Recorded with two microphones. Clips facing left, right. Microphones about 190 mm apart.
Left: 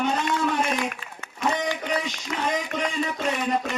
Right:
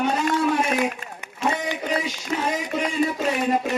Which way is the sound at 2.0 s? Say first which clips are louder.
Right 3 dB; 5° right (ahead or behind).